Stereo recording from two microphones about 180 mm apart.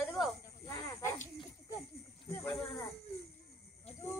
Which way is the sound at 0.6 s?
15° left (ahead or behind).